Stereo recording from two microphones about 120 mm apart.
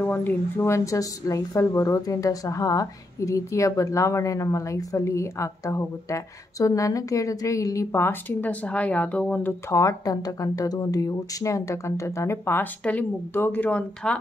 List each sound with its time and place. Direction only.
0.0 s a woman's voice: 15° left (ahead or behind)